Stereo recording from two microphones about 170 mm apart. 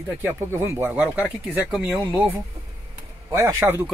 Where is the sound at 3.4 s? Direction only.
15° right (ahead or behind).